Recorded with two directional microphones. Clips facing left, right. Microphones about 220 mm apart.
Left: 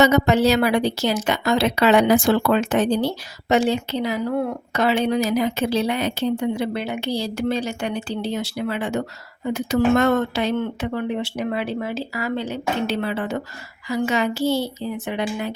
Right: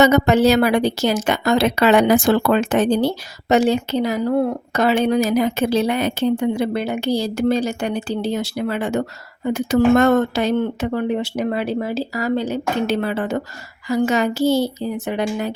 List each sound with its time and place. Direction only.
0.0 s a woman's voice: 50° right (ahead or behind)